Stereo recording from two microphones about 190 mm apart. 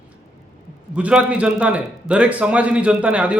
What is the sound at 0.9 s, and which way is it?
A man's voice, 5° right (ahead or behind).